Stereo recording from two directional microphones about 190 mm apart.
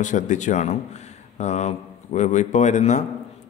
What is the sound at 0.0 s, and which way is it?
Speech, 40° left (ahead or behind).